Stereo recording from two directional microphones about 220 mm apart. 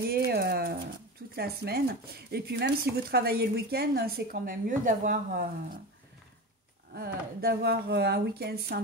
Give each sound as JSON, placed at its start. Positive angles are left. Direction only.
{"t": 0.1, "sound": "a sound", "side_deg": -45}
{"t": 1.3, "sound": "a woman's voice", "side_deg": -45}
{"t": 6.9, "sound": "a woman's voice", "side_deg": -45}